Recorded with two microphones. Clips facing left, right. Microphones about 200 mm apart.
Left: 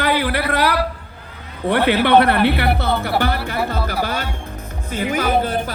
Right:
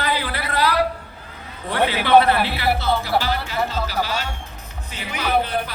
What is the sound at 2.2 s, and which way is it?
Speech, 60° left (ahead or behind).